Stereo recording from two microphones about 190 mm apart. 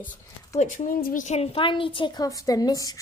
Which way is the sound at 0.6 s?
45° left (ahead or behind).